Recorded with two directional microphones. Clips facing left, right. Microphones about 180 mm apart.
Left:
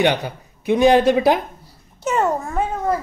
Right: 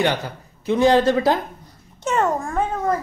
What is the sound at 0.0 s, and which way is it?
Speech, 15° left (ahead or behind).